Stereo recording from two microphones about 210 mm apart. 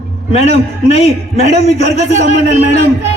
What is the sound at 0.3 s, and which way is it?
A man's voice, 30° left (ahead or behind).